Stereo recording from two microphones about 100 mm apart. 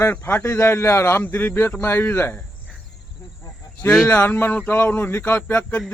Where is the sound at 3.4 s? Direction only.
30° left (ahead or behind).